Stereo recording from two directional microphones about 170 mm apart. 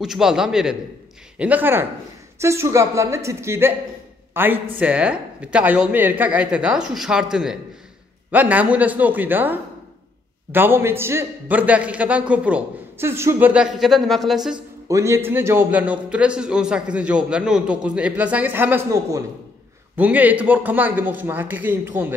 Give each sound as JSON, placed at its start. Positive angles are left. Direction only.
{"t": 0.0, "sound": "a man's voice", "side_deg": -5}
{"t": 14.9, "sound": "a man's voice", "side_deg": -15}